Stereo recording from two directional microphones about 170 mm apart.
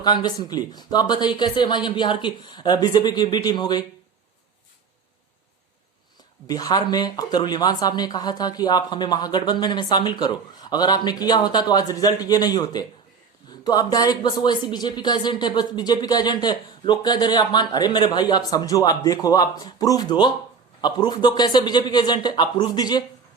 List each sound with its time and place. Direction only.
0.0 s speech: 25° left (ahead or behind)
6.5 s speech: 20° left (ahead or behind)